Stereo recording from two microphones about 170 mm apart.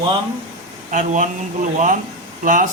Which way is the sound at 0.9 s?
50° right (ahead or behind).